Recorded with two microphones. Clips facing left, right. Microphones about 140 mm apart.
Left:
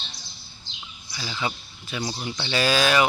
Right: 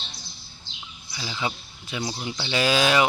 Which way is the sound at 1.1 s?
15° right (ahead or behind).